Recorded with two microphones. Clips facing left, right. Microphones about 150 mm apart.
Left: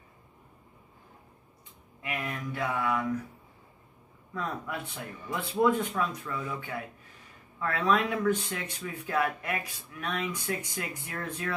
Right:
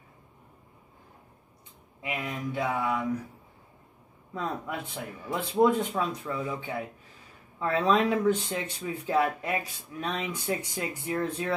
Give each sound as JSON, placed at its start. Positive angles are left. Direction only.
{"t": 2.0, "sound": "a sound", "side_deg": -20}
{"t": 4.3, "sound": "speech", "side_deg": -25}
{"t": 7.8, "sound": "speech", "side_deg": -25}